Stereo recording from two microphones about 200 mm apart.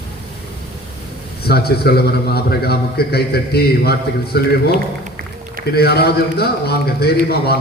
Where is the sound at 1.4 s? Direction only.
50° left (ahead or behind).